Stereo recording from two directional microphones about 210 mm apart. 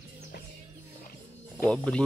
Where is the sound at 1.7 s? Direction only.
5° left (ahead or behind).